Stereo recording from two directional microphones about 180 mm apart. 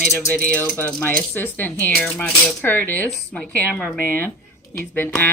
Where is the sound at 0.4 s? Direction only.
5° left (ahead or behind).